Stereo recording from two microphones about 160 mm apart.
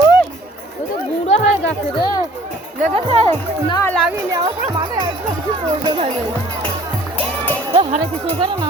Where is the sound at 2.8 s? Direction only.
40° right (ahead or behind).